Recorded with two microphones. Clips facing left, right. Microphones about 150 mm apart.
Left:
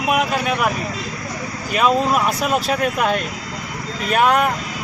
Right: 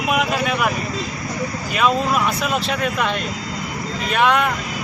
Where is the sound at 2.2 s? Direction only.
45° left (ahead or behind).